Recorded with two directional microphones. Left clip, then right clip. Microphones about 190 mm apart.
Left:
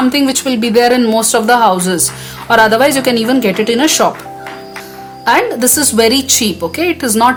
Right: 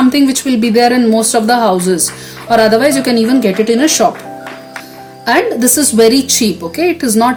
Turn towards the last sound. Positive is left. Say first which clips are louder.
# left 1 dB
turn(degrees=45)  # may be behind; listen again after turning